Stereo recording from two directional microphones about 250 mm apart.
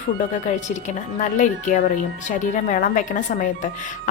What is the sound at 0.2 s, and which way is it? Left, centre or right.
A woman's voice, left.